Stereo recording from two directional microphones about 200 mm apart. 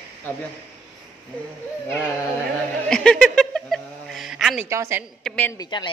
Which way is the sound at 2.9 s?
5° left (ahead or behind).